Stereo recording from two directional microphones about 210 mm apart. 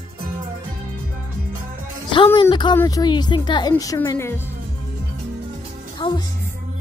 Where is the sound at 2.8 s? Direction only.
15° left (ahead or behind).